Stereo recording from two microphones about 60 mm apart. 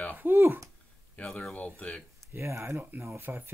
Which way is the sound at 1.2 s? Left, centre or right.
Centre.